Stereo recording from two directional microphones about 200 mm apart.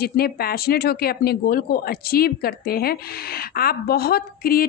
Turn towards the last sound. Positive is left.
turn(degrees=45)  # may be behind; listen again after turning